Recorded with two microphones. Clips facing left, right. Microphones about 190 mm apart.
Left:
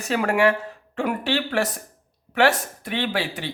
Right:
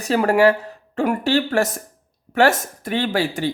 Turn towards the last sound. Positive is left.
turn(degrees=-45)  # may be behind; listen again after turning